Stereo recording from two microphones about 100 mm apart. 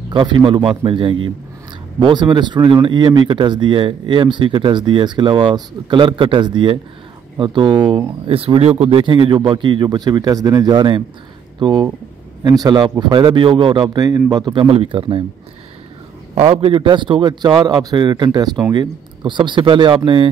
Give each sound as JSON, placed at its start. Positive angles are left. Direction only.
{"t": 0.1, "sound": "a man's voice", "side_deg": -55}
{"t": 8.3, "sound": "speech", "side_deg": -70}
{"t": 16.3, "sound": "speech", "side_deg": -65}